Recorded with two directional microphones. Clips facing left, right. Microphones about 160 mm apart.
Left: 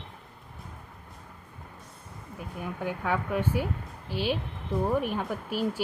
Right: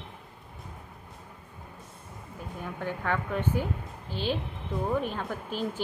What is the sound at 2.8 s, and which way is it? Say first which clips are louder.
Speech: left 1 dB; 10° left (ahead or behind).